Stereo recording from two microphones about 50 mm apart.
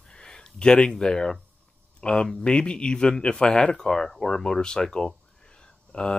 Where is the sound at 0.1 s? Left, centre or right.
Centre.